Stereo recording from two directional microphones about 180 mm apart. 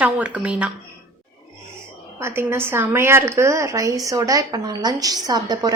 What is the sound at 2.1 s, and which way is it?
A woman's voice, 15° right (ahead or behind).